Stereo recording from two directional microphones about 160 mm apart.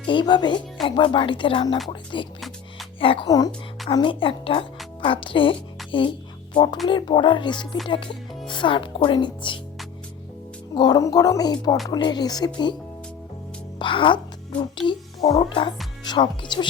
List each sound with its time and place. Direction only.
0.1 s a woman's voice: 30° left (ahead or behind)
10.8 s speech: 25° left (ahead or behind)
13.7 s speech: 30° left (ahead or behind)